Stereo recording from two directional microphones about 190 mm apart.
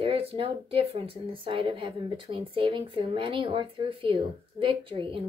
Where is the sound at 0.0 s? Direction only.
30° right (ahead or behind).